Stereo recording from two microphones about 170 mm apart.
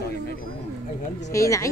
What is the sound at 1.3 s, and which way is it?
Speech, 20° left (ahead or behind).